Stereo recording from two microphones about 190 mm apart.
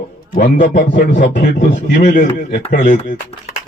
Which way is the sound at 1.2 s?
45° left (ahead or behind).